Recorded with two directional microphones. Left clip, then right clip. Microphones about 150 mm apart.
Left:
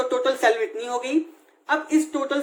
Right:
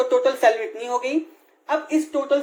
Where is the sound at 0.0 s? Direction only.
20° right (ahead or behind).